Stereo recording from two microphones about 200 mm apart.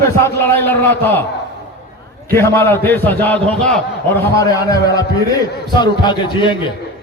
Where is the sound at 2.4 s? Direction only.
15° left (ahead or behind).